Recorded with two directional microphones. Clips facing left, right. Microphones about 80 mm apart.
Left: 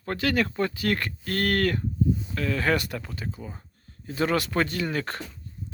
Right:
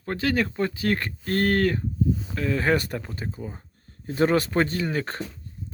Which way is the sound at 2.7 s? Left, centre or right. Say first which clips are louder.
Right 2 dB; right.